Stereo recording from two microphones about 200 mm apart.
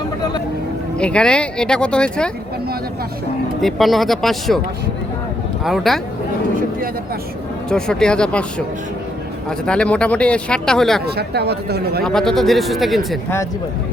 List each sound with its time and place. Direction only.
0.9 s speech: 5° left (ahead or behind)
3.6 s speech: centre (ahead or behind)
5.6 s speech: centre (ahead or behind)
7.7 s speech: 5° left (ahead or behind)
9.6 s speech: 5° left (ahead or behind)
11.0 s speech: 55° right (ahead or behind)
12.0 s speech: centre (ahead or behind)